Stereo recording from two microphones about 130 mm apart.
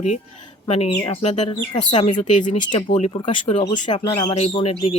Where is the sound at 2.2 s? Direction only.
65° left (ahead or behind).